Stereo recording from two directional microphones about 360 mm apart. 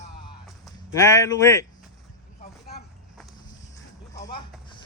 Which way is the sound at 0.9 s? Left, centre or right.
Centre.